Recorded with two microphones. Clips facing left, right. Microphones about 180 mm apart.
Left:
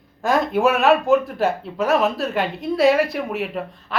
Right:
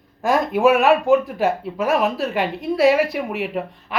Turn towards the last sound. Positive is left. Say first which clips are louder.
# right 2 dB
turn(degrees=-15)  # may be behind; listen again after turning